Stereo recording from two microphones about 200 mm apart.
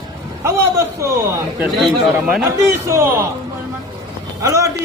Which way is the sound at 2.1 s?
5° right (ahead or behind).